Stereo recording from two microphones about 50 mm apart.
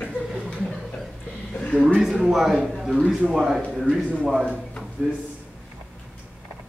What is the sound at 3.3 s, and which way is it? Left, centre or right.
Speech, centre.